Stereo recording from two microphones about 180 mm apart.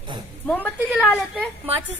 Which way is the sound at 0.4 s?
10° left (ahead or behind).